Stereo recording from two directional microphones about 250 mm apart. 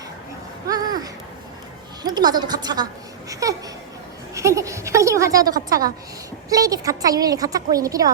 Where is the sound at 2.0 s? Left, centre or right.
Centre.